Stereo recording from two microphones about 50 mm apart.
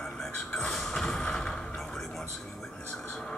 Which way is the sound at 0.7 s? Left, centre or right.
Centre.